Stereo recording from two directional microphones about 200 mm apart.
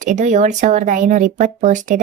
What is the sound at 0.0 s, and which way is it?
A woman's voice, 40° right (ahead or behind).